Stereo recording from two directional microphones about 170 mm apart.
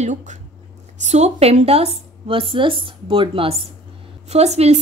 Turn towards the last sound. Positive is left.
turn(degrees=-40)  # may be behind; listen again after turning